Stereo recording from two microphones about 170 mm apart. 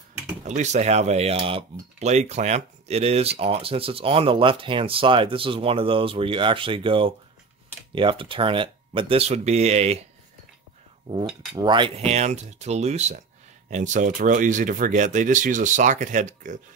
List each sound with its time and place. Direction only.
0.6 s speech: 40° right (ahead or behind)
11.1 s cutlery: 30° right (ahead or behind)
11.6 s speech: 30° right (ahead or behind); by 16.5 s 45° right (ahead or behind)